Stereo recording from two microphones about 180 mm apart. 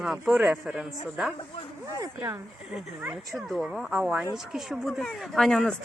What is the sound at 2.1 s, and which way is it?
Speech, 15° right (ahead or behind).